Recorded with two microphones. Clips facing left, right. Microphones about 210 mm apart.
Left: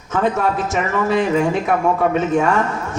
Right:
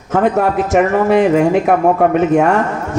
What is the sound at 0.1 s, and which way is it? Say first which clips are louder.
Speech: right 5 dB; 55° right (ahead or behind).